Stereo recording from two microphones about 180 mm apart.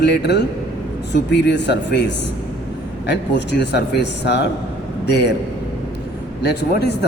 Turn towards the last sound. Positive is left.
turn(degrees=70)  # may be behind; listen again after turning